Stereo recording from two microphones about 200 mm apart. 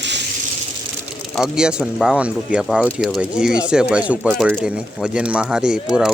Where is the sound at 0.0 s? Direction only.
60° right (ahead or behind).